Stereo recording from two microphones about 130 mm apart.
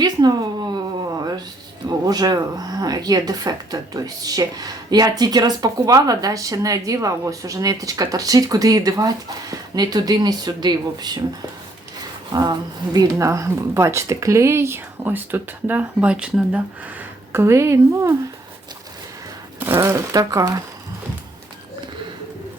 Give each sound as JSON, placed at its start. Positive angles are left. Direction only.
{"t": 0.0, "sound": "a sound", "side_deg": -35}
{"t": 1.9, "sound": "speech", "side_deg": -30}
{"t": 12.3, "sound": "speech", "side_deg": -30}
{"t": 17.3, "sound": "speech", "side_deg": -20}
{"t": 19.5, "sound": "speech", "side_deg": -15}